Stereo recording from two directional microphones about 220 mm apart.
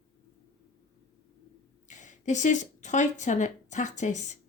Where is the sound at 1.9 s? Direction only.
35° left (ahead or behind).